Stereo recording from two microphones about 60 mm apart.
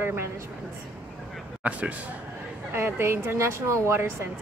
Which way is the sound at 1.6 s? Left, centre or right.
Right.